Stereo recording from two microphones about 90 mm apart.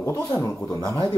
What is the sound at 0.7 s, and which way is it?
Speech, 45° left (ahead or behind).